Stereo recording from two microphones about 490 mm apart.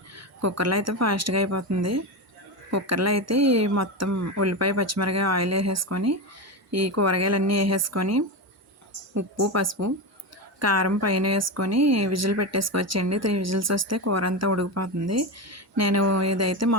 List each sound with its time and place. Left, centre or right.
0.2 s speech: right